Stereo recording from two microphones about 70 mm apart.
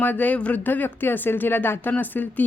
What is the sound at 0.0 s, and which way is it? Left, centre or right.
A woman's voice, left.